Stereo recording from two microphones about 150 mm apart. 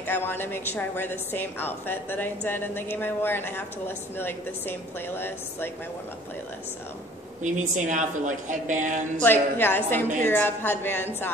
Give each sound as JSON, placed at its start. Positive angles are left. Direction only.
{"t": 0.0, "sound": "a woman's voice", "side_deg": 15}
{"t": 7.4, "sound": "a woman's voice", "side_deg": -55}
{"t": 9.2, "sound": "a woman's voice", "side_deg": 15}